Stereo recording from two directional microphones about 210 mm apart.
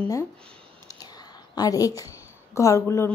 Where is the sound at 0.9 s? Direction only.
20° left (ahead or behind).